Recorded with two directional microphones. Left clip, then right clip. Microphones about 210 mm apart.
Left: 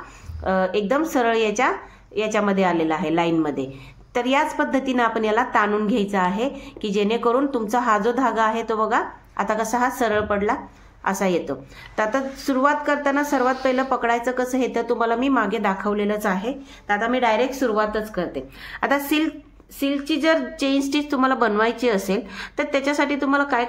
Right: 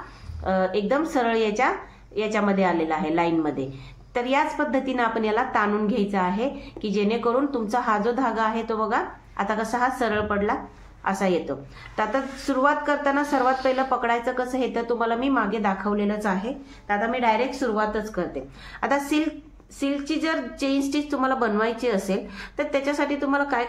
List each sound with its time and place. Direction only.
0.4 s a woman's voice: 20° left (ahead or behind)